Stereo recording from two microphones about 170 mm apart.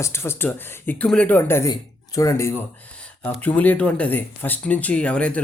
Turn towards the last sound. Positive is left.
turn(degrees=5)  # may be behind; listen again after turning